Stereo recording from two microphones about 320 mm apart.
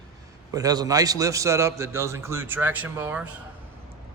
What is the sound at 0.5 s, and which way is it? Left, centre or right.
A man's voice, centre.